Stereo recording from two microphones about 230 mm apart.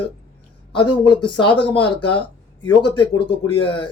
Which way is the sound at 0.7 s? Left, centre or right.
Centre.